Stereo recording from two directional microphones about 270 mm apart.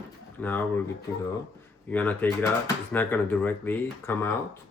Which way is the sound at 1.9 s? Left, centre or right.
Centre.